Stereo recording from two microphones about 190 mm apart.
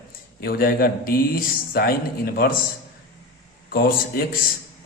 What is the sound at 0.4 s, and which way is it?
Speech, 50° left (ahead or behind).